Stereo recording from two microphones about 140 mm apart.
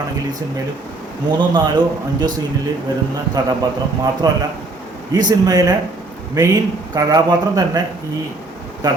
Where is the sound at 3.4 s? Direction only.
25° right (ahead or behind).